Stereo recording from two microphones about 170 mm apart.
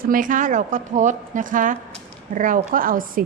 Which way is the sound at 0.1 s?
50° right (ahead or behind).